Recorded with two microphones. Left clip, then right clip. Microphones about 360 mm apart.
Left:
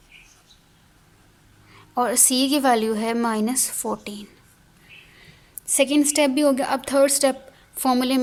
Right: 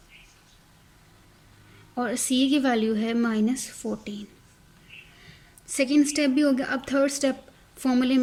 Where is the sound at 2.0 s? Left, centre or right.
Centre.